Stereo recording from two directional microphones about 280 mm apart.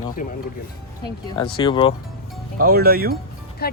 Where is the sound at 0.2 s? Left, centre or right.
Left.